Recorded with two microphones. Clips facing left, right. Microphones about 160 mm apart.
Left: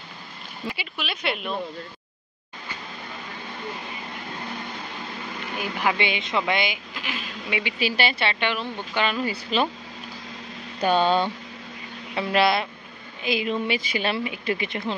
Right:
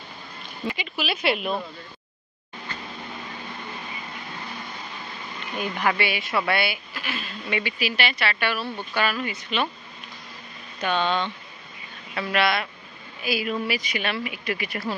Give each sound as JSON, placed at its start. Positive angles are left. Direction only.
{"t": 0.9, "sound": "speech", "side_deg": -5}
{"t": 5.6, "sound": "a woman's voice", "side_deg": 10}
{"t": 7.8, "sound": "speech", "side_deg": 30}
{"t": 9.2, "sound": "speech", "side_deg": 35}
{"t": 10.8, "sound": "speech", "side_deg": 35}